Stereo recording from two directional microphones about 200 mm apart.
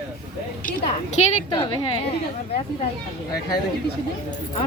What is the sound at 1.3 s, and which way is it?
Speech, 25° left (ahead or behind).